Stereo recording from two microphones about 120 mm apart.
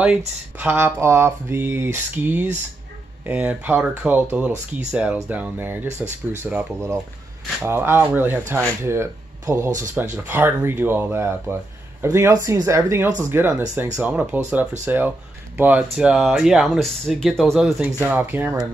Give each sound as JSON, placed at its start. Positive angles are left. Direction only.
{"t": 0.6, "sound": "speech", "side_deg": -15}
{"t": 18.0, "sound": "speech", "side_deg": -15}